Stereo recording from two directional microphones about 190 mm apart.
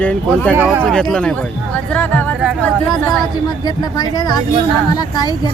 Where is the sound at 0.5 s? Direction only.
10° right (ahead or behind).